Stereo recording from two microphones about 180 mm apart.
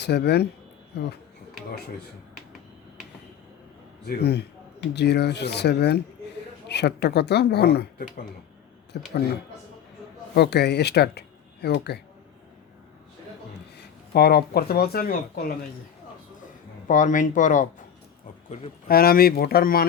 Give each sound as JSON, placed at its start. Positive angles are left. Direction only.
{"t": 0.0, "sound": "speech", "side_deg": 65}
{"t": 4.0, "sound": "speech", "side_deg": 65}
{"t": 10.3, "sound": "speech", "side_deg": 65}
{"t": 13.7, "sound": "speech", "side_deg": 65}
{"t": 16.8, "sound": "speech", "side_deg": 45}
{"t": 18.9, "sound": "speech", "side_deg": 55}